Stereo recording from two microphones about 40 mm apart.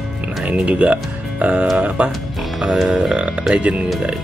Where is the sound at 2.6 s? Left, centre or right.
Centre.